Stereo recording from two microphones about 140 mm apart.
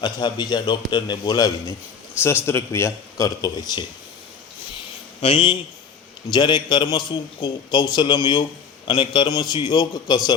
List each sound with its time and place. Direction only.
0.0 s a man's voice: 30° left (ahead or behind)
2.2 s a man's voice: 15° left (ahead or behind)
5.2 s a man's voice: 40° left (ahead or behind)